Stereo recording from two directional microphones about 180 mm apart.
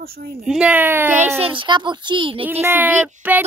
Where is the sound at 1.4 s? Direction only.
25° right (ahead or behind).